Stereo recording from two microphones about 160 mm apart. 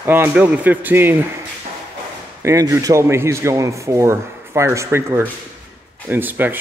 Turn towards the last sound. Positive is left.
turn(degrees=-10)  # may be behind; listen again after turning